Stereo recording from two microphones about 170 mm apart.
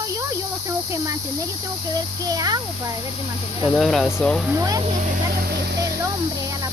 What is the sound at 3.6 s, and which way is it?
Speech, centre (ahead or behind).